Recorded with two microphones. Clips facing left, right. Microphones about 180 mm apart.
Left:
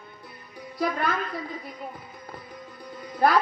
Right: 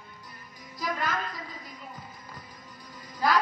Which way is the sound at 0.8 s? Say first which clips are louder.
Left 5 dB; 60° left (ahead or behind).